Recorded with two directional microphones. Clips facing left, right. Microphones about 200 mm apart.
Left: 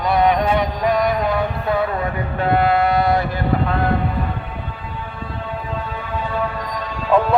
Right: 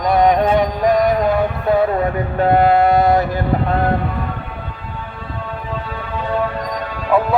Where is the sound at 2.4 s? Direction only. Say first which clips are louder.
Right 4 dB; 45° right (ahead or behind).